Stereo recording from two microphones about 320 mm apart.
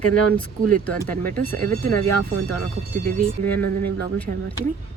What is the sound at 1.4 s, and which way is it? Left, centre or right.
Speech, right.